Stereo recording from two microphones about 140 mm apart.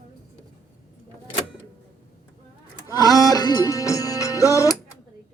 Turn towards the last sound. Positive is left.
turn(degrees=25)  # may be behind; listen again after turning